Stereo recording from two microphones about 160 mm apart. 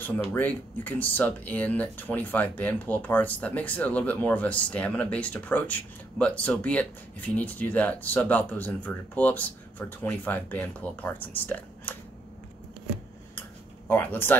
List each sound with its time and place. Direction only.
0.0 s speech: 10° left (ahead or behind)
13.8 s speech: 10° left (ahead or behind)